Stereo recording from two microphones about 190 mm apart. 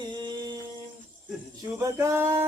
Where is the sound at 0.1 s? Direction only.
25° right (ahead or behind).